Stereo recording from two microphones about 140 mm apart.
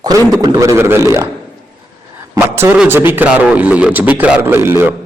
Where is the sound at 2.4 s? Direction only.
15° right (ahead or behind).